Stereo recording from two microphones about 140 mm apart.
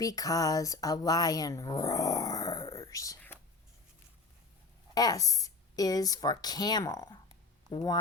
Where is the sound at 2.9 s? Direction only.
25° left (ahead or behind).